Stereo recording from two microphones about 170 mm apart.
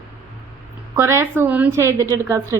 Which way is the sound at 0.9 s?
15° right (ahead or behind).